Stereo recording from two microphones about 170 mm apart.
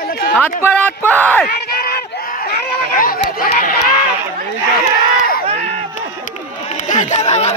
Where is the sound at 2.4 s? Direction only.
55° left (ahead or behind).